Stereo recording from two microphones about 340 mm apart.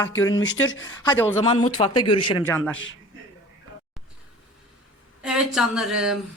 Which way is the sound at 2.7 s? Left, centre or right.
Left.